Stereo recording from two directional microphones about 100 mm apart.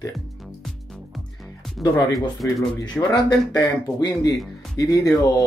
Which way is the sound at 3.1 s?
45° left (ahead or behind).